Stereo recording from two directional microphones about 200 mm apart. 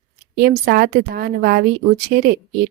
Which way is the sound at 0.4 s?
50° right (ahead or behind).